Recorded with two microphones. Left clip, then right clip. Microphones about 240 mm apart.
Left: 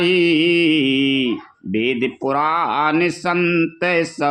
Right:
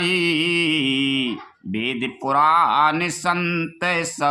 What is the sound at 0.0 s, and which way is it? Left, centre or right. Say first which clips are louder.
Speech: left 5 dB; centre.